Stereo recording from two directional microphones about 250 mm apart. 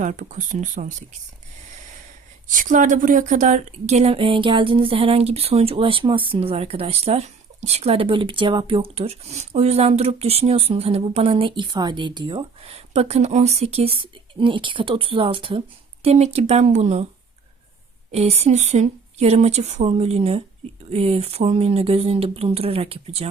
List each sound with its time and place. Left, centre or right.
0.0 s speech: right
2.5 s speech: right
18.1 s speech: right